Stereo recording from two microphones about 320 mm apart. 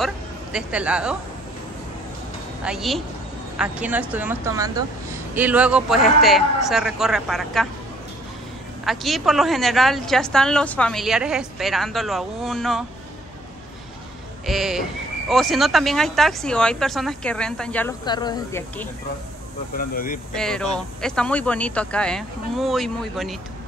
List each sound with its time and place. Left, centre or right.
0.0 s speech: centre
2.6 s speech: centre
8.8 s speech: centre
14.4 s speech: centre
19.8 s speech: left
20.3 s speech: centre